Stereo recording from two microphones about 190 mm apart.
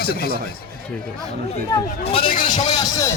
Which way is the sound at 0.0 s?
55° left (ahead or behind).